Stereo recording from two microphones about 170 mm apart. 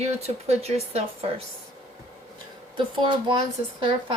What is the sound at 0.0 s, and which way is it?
Speech, 40° right (ahead or behind).